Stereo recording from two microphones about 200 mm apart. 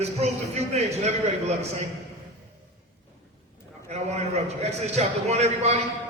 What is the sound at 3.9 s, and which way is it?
Music, 35° right (ahead or behind).